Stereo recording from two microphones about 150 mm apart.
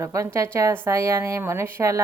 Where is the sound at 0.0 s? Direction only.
20° right (ahead or behind).